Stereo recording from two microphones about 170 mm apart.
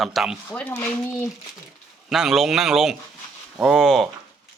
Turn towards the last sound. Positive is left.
turn(degrees=0)  # may be behind; listen again after turning